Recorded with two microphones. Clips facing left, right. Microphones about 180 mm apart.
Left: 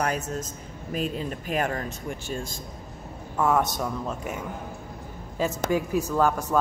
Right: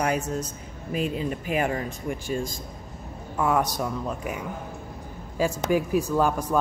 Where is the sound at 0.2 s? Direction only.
40° left (ahead or behind).